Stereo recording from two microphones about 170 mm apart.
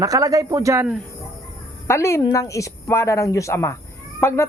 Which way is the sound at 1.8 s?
15° left (ahead or behind).